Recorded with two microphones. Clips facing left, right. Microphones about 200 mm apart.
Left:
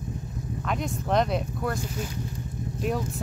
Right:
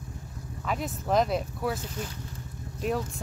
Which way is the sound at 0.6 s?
Centre (ahead or behind).